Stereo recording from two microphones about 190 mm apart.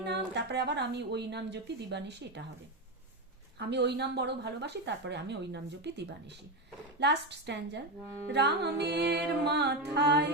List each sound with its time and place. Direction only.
0.0 s speech: 60° right (ahead or behind)
3.7 s speech: 65° right (ahead or behind)